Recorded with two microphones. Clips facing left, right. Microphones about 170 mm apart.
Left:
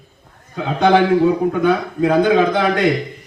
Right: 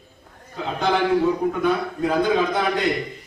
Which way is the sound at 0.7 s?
80° left.